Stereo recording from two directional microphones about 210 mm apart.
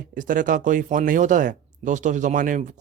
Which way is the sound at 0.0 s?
40° right (ahead or behind).